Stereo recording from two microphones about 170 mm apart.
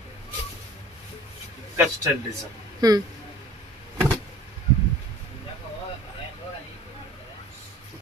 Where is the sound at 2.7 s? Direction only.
20° right (ahead or behind).